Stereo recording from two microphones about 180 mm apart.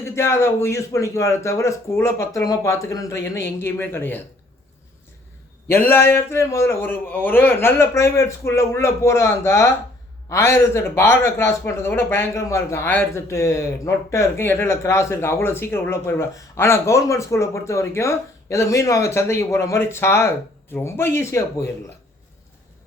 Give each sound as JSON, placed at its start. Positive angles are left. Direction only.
{"t": 0.0, "sound": "a man's voice", "side_deg": 15}
{"t": 5.6, "sound": "a man's voice", "side_deg": 15}